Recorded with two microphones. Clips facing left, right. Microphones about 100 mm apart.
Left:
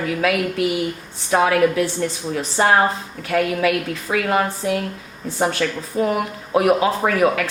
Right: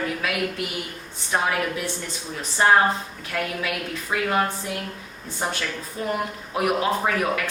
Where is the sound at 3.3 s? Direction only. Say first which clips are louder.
Left 9 dB; 70° left (ahead or behind).